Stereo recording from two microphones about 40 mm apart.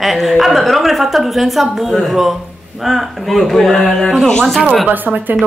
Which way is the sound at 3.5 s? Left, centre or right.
Centre.